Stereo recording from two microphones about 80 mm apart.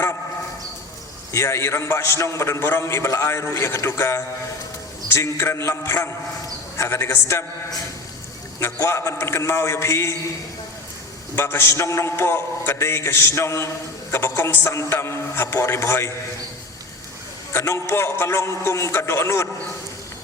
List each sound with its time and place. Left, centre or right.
1.3 s a man's voice: left
8.5 s a man's voice: left
11.3 s a man's voice: left
17.5 s a man's voice: left